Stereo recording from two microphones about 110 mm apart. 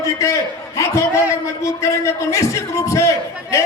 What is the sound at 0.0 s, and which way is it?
A man's voice, 30° left (ahead or behind).